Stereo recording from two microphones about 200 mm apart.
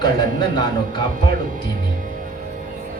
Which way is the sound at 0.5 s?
20° left (ahead or behind).